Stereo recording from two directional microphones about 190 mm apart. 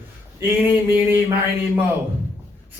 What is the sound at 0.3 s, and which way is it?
Speech, 10° right (ahead or behind).